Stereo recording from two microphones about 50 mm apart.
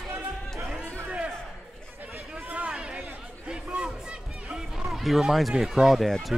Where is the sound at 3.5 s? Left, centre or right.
Centre.